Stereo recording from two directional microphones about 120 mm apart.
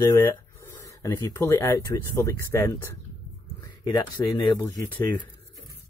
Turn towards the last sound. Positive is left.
turn(degrees=25)  # may be behind; listen again after turning